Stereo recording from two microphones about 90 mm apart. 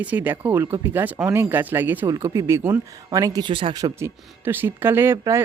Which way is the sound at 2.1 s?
35° right (ahead or behind).